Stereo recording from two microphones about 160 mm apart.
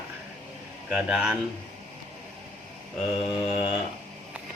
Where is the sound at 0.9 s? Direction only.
5° right (ahead or behind).